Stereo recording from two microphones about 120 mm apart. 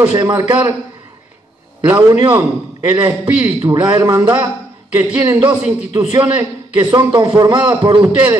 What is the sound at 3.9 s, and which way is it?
Speech, 30° right (ahead or behind).